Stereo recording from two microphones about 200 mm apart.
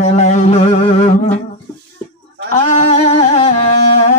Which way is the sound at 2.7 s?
35° left (ahead or behind).